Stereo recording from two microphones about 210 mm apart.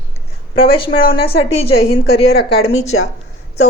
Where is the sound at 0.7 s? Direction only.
25° left (ahead or behind).